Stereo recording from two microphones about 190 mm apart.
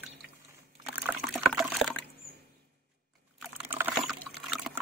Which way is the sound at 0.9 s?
10° right (ahead or behind).